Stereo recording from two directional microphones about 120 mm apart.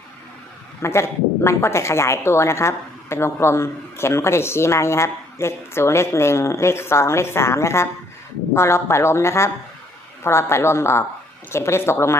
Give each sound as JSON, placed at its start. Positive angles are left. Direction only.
{"t": 0.8, "sound": "speech", "side_deg": 20}